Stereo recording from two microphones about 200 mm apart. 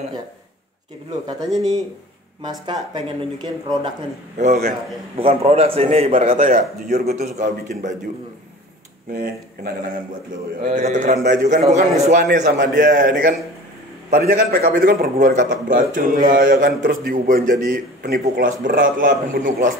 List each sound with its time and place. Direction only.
2.6 s speech: 20° right (ahead or behind)
4.4 s a man's voice: 35° right (ahead or behind)
6.1 s a man's voice: 40° right (ahead or behind)
9.1 s a man's voice: 50° right (ahead or behind)
10.6 s a man's voice: 40° right (ahead or behind)